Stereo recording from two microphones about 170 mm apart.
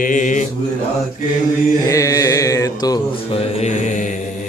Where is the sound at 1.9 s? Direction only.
20° left (ahead or behind).